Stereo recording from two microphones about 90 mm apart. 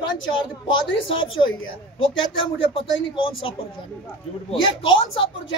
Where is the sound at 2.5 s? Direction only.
85° left.